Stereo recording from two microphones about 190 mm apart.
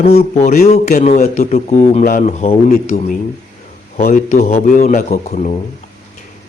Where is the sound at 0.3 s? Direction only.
35° left (ahead or behind).